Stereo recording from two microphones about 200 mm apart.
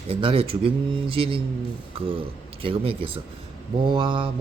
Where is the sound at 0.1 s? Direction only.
25° right (ahead or behind).